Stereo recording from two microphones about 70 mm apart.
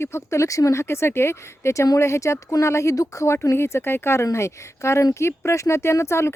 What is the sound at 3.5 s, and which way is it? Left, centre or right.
Speech, left.